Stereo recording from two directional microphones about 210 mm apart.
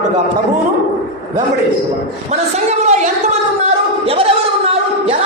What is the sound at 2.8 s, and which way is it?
Speech, 35° right (ahead or behind).